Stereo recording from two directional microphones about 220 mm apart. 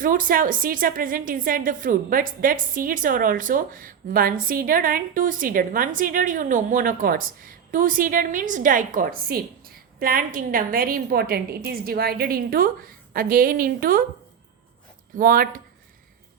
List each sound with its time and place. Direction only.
0.0 s a woman's voice: 40° right (ahead or behind)
15.1 s a woman's voice: 40° right (ahead or behind)